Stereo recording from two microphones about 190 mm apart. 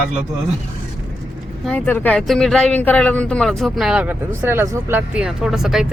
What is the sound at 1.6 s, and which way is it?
Speech, 5° left (ahead or behind).